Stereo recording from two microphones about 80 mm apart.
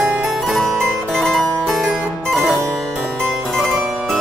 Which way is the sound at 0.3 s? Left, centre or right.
Centre.